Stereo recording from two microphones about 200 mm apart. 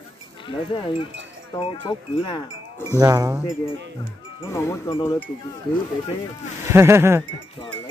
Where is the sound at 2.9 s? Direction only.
15° right (ahead or behind).